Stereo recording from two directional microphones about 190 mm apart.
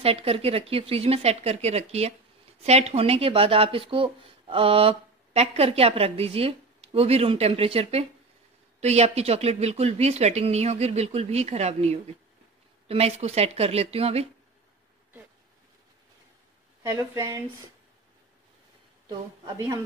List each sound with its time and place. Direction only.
0.0 s speech: 30° right (ahead or behind)
16.8 s speech: 15° right (ahead or behind)
19.0 s speech: 20° right (ahead or behind)